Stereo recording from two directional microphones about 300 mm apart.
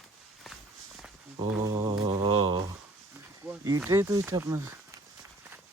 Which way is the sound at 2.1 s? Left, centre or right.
Centre.